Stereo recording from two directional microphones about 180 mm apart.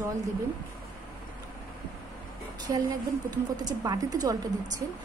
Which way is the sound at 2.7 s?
20° right (ahead or behind).